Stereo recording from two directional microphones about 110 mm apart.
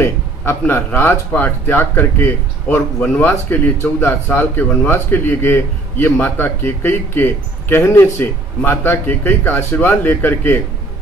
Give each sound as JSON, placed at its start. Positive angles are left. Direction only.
{"t": 0.0, "sound": "speech", "side_deg": 20}